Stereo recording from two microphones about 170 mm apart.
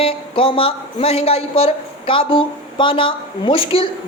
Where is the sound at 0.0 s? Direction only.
30° left (ahead or behind).